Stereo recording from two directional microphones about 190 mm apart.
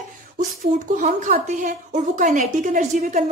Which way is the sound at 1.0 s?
40° right (ahead or behind).